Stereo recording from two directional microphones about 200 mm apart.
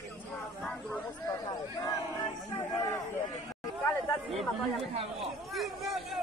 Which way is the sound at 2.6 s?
15° left (ahead or behind).